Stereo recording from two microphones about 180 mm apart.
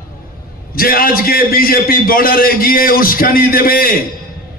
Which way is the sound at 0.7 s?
55° left (ahead or behind).